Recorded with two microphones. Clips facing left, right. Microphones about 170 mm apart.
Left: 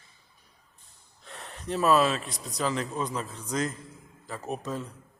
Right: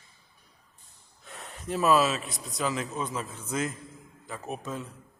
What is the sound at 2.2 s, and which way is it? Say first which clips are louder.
A man's voice: left 1 dB; centre (ahead or behind).